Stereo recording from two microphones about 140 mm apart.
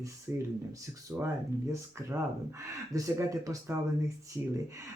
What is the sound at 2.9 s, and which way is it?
Speech, 25° right (ahead or behind).